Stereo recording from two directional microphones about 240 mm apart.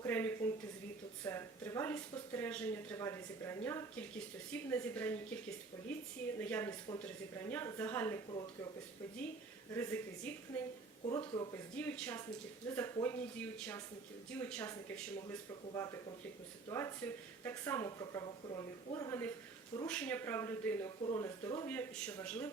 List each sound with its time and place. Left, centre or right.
0.0 s speech: centre
6.4 s speech: centre
9.7 s speech: centre
11.0 s speech: left
11.8 s speech: centre